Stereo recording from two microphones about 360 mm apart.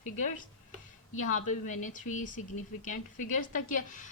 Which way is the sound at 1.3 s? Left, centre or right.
Left.